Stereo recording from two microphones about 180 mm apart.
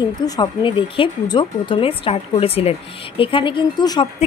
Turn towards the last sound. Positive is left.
turn(degrees=25)  # may be behind; listen again after turning